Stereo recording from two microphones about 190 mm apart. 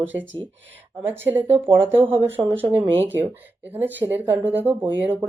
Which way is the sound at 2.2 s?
10° right (ahead or behind).